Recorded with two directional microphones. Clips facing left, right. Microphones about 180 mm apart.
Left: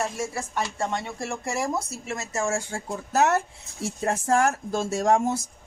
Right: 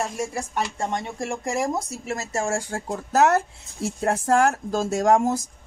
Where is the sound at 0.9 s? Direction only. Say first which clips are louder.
Right 2 dB; 50° right (ahead or behind).